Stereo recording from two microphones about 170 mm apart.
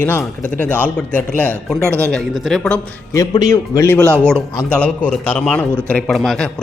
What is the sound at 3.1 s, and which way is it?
Speech, 20° left (ahead or behind).